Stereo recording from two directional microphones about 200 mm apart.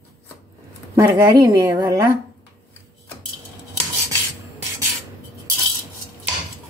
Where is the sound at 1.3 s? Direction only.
20° right (ahead or behind).